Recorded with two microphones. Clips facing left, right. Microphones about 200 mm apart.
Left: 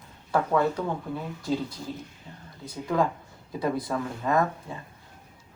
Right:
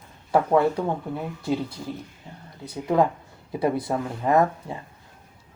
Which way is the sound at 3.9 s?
25° right (ahead or behind).